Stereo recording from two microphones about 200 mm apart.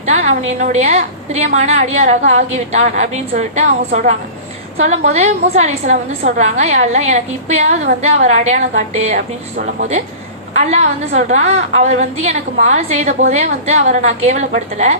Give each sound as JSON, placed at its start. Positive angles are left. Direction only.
{"t": 0.4, "sound": "a woman's voice", "side_deg": -35}
{"t": 10.7, "sound": "a woman's voice", "side_deg": -35}